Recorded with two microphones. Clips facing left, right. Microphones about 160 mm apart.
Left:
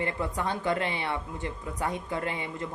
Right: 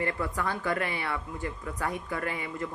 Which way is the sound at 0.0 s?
20° left (ahead or behind).